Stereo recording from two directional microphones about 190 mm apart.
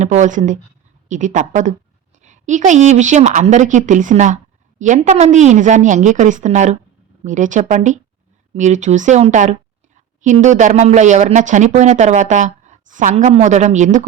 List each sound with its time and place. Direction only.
0.0 s speech: 40° right (ahead or behind)